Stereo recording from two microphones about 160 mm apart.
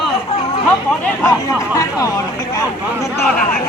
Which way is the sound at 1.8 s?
20° left (ahead or behind).